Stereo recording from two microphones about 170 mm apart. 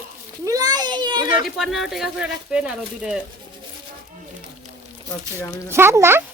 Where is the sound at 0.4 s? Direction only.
20° right (ahead or behind).